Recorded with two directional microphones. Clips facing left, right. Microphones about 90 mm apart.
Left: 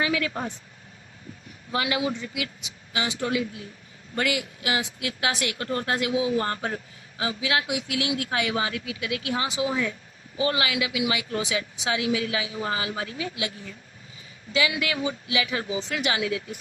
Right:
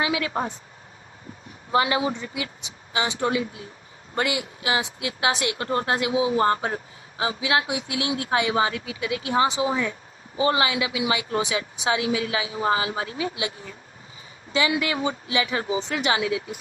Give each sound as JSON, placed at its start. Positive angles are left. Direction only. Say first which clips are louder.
{"t": 0.0, "sound": "a woman's voice", "louder": "right 2 dB", "side_deg": -20}
{"t": 1.7, "sound": "a woman's voice", "louder": "right 4 dB", "side_deg": -30}